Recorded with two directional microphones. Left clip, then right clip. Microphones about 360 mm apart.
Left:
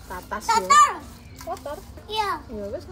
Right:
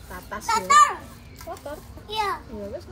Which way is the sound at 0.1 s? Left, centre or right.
Centre.